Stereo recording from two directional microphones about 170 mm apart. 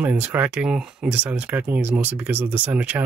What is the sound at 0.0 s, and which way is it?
Speech, 10° right (ahead or behind).